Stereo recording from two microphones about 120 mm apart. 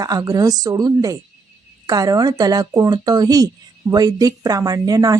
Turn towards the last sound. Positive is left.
turn(degrees=-30)  # may be behind; listen again after turning